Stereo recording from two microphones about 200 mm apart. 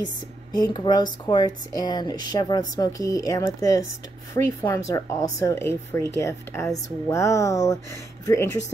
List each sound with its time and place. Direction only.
0.5 s speech: 20° left (ahead or behind)